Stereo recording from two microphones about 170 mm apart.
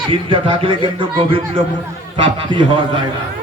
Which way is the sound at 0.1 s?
30° right (ahead or behind).